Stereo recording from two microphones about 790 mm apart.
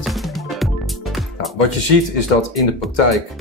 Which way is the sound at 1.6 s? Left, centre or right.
Left.